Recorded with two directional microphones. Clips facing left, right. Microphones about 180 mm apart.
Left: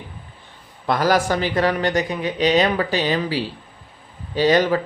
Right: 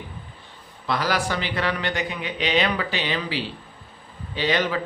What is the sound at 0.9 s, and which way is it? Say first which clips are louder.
A man's voice: left 6 dB; 45° left (ahead or behind).